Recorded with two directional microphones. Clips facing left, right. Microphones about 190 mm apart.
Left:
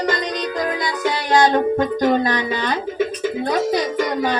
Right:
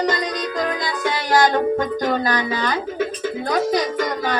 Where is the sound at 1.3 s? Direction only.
20° left (ahead or behind).